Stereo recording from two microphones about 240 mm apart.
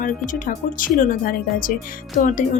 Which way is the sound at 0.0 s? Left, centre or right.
Left.